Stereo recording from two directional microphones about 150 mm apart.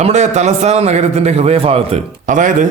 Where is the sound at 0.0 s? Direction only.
50° right (ahead or behind).